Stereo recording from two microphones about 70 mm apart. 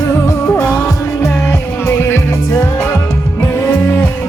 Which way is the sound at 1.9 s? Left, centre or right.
Left.